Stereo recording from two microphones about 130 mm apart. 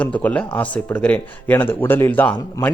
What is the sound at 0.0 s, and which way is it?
A man's voice, 10° left (ahead or behind).